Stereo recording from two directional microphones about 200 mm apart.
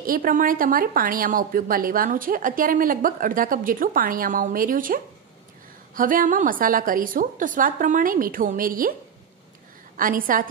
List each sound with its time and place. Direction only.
0.0 s a woman's voice: 45° right (ahead or behind)
9.9 s a woman's voice: 45° right (ahead or behind)